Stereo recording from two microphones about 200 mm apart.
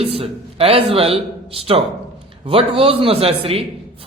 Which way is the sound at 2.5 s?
30° right (ahead or behind).